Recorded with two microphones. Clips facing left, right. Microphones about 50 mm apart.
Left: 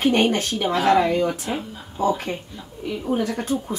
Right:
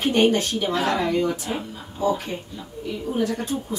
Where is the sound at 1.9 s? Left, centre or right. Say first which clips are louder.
Left 1 dB; left.